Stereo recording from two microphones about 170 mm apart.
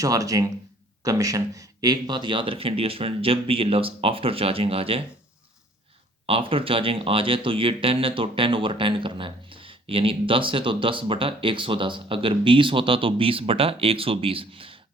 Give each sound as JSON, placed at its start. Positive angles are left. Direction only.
{"t": 0.0, "sound": "speech", "side_deg": -20}
{"t": 6.2, "sound": "speech", "side_deg": -30}